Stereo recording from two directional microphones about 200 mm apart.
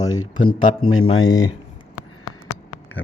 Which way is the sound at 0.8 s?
90° left.